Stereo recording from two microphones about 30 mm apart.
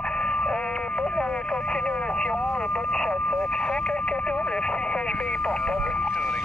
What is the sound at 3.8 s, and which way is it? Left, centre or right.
Speech, left.